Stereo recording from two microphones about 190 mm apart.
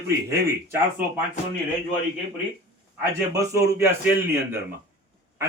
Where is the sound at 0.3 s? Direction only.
10° right (ahead or behind).